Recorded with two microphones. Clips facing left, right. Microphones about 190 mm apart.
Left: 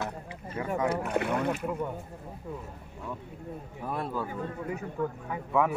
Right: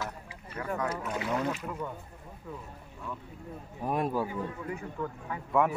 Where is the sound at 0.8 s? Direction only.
60° left (ahead or behind).